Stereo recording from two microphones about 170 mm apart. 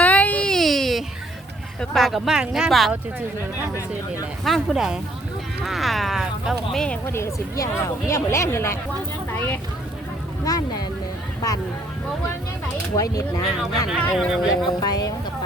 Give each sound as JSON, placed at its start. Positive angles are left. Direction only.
{"t": 0.0, "sound": "baby cry", "side_deg": 10}
{"t": 1.8, "sound": "speech", "side_deg": 0}
{"t": 4.4, "sound": "speech", "side_deg": 0}
{"t": 13.0, "sound": "speech", "side_deg": 20}
{"t": 13.9, "sound": "speech", "side_deg": 0}
{"t": 14.8, "sound": "speech", "side_deg": 20}